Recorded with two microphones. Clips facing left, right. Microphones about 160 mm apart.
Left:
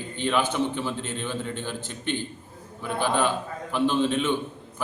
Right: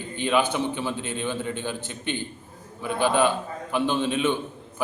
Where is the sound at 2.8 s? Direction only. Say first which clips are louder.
Right 3 dB; 5° right (ahead or behind).